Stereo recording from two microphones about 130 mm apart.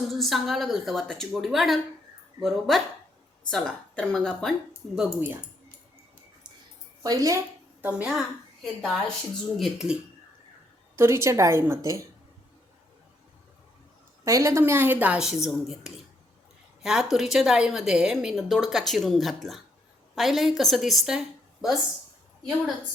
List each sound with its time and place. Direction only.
0.1 s a woman's voice: centre (ahead or behind)
7.0 s a woman's voice: 30° right (ahead or behind)
7.8 s a woman's voice: 10° right (ahead or behind)
10.9 s a woman's voice: 20° right (ahead or behind)
14.3 s a woman's voice: 25° right (ahead or behind); by 21.8 s 5° right (ahead or behind)